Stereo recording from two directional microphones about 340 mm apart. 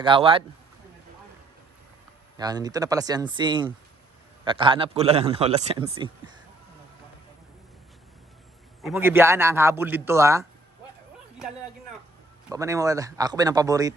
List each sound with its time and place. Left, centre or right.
0.0 s a man's voice: centre
2.4 s a man's voice: centre
8.8 s a man's voice: centre
12.5 s a man's voice: centre